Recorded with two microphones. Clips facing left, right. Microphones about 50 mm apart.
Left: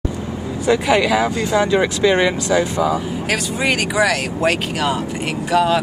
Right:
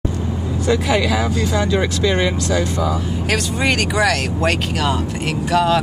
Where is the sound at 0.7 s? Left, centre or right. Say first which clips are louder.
Left 2 dB; centre.